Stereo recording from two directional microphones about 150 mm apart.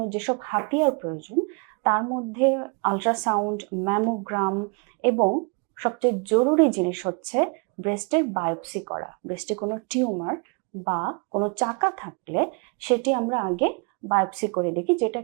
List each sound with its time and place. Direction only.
0.0 s speech: 20° right (ahead or behind)